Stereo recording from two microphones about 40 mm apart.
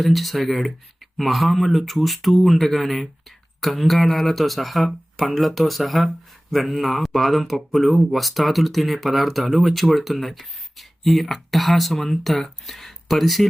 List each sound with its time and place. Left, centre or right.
0.0 s speech: centre